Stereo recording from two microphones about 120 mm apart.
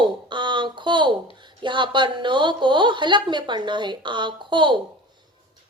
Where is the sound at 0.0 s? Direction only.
40° right (ahead or behind).